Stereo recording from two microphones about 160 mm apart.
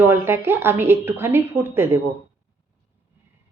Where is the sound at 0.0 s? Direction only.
15° right (ahead or behind).